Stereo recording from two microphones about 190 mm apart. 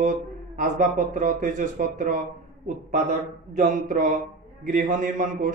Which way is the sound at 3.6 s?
45° right (ahead or behind).